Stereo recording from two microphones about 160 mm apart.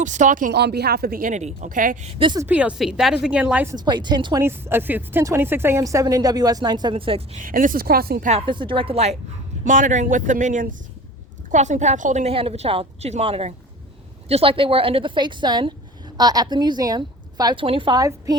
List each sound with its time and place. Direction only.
0.0 s speech: 50° right (ahead or behind)
0.5 s a woman's voice: 90° right; by 2.0 s 55° right (ahead or behind)
2.0 s a woman's voice: 35° right (ahead or behind)
2.4 s a woman's voice: 10° right (ahead or behind)
3.8 s speech: 30° right (ahead or behind)
4.4 s speech: 15° right (ahead or behind); by 7.2 s 35° right (ahead or behind)
7.3 s a woman's voice: 60° right (ahead or behind)
8.3 s a woman's voice: 35° right (ahead or behind)
9.6 s a woman's voice: 50° right (ahead or behind); by 18.3 s 25° right (ahead or behind)